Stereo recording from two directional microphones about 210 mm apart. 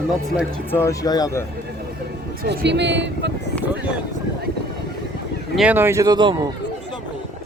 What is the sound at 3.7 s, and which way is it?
Vehicle, 5° right (ahead or behind).